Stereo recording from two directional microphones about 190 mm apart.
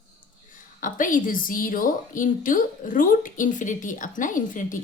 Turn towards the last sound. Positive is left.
turn(degrees=45)  # may be behind; listen again after turning